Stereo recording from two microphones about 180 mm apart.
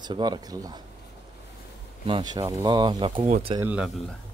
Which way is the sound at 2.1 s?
20° right (ahead or behind).